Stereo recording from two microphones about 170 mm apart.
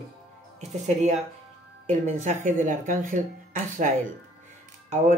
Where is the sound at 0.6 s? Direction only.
40° right (ahead or behind).